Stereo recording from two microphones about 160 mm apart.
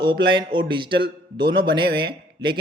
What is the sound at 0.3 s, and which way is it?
Speech, 30° right (ahead or behind).